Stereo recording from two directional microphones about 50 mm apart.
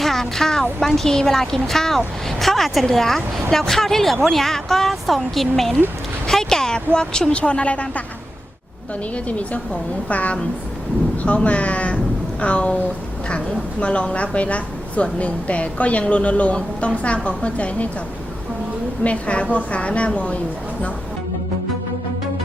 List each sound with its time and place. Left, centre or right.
0.0 s a sound: centre
0.9 s a woman's voice: centre; by 8.0 s left
9.1 s a woman's voice: left
11.3 s a woman's voice: left
19.0 s a woman's voice: left